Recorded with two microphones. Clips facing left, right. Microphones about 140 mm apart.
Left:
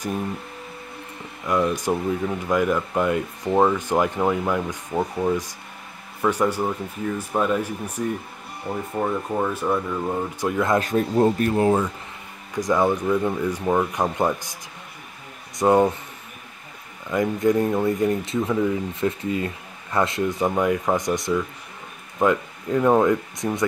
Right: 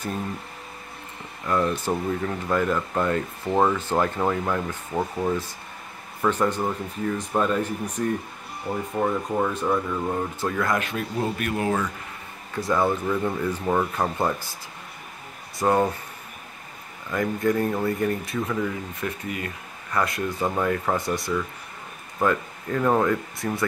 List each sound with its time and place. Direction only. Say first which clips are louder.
1.4 s speech: left 2 dB; 10° left (ahead or behind)
10.4 s speech: left 5 dB; 20° left (ahead or behind)
10.8 s speech: left 8 dB; 40° left (ahead or behind)
12.5 s speech: left 3 dB; 15° left (ahead or behind)
15.6 s speech: left 4 dB; 15° left (ahead or behind)
17.1 s speech: left 3 dB; 20° left (ahead or behind)